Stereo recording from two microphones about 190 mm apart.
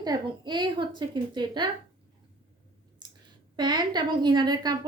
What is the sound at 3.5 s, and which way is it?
A child's voice, 20° right (ahead or behind).